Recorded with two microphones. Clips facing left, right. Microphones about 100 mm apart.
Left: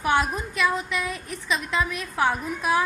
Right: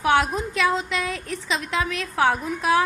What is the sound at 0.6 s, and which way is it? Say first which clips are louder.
A woman's voice: right 2 dB; 90° right.